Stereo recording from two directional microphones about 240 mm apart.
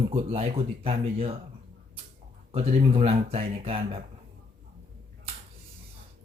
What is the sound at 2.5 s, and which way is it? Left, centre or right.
Speech, right.